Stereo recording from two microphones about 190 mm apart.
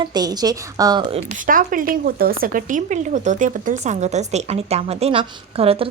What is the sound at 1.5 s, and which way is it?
Speech, 45° right (ahead or behind).